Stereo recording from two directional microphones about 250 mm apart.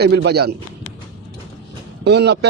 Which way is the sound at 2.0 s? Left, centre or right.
Right.